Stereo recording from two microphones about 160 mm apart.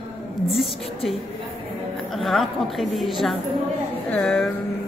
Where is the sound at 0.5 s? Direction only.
Centre (ahead or behind).